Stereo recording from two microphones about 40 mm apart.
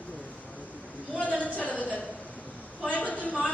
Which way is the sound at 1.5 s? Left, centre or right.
Left.